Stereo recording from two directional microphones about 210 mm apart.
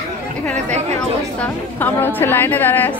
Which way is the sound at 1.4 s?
10° left (ahead or behind).